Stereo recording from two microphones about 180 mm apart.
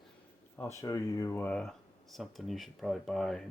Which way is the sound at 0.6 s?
15° left (ahead or behind).